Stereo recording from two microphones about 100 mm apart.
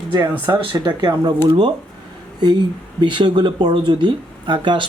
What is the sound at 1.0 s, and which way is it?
Speech, 45° right (ahead or behind).